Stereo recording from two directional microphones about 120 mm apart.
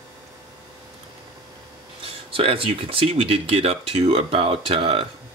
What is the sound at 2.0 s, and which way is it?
Speech, 50° right (ahead or behind).